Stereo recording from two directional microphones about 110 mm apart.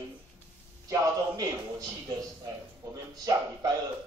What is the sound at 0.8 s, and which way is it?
A man's voice, 30° right (ahead or behind).